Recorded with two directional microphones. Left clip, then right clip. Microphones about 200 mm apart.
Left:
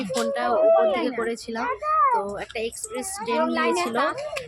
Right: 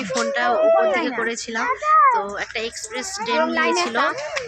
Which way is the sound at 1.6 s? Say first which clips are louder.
Right 6 dB; 25° right (ahead or behind).